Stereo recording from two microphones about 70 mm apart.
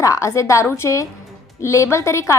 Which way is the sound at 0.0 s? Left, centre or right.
Left.